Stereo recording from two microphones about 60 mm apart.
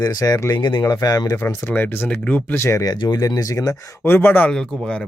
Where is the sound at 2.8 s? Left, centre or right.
Left.